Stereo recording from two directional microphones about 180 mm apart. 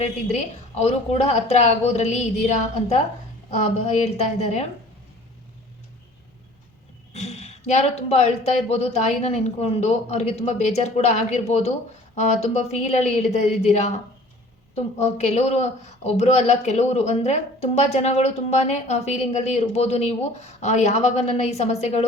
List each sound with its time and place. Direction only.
0.0 s speech: 40° left (ahead or behind)
7.1 s speech: 35° left (ahead or behind)